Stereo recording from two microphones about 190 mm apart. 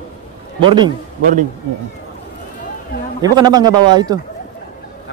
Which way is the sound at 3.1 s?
20° right (ahead or behind).